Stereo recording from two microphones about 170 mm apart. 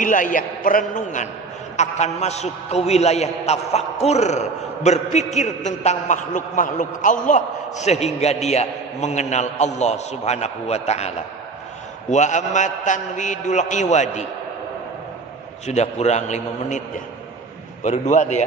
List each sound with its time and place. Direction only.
0.0 s a man's voice: 50° left (ahead or behind)
15.6 s a man's voice: 40° left (ahead or behind)
17.8 s a man's voice: 45° left (ahead or behind)